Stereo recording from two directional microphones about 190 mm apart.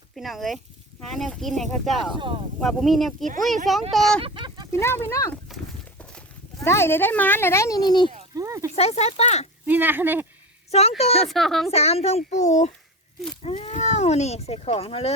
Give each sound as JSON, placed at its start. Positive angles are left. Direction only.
{"t": 0.2, "sound": "speech", "side_deg": 0}
{"t": 2.1, "sound": "speech", "side_deg": -25}
{"t": 2.6, "sound": "speech", "side_deg": 0}
{"t": 4.2, "sound": "a sound", "side_deg": -25}
{"t": 4.7, "sound": "speech", "side_deg": 15}
{"t": 6.6, "sound": "speech", "side_deg": 15}
{"t": 8.4, "sound": "speech", "side_deg": -15}
{"t": 8.7, "sound": "speech", "side_deg": 35}
{"t": 9.6, "sound": "speech", "side_deg": -10}
{"t": 10.7, "sound": "speech", "side_deg": 35}
{"t": 11.3, "sound": "speech", "side_deg": 0}
{"t": 11.7, "sound": "speech", "side_deg": 35}